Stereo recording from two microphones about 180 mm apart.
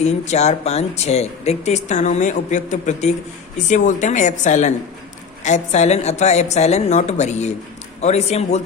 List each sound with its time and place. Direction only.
0.0 s speech: 40° left (ahead or behind)